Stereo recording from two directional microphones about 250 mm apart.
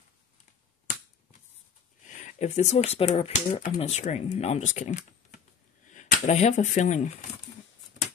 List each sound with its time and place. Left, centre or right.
2.0 s speech: left